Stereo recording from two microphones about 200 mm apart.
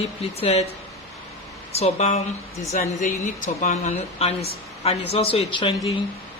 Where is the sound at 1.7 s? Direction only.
30° left (ahead or behind).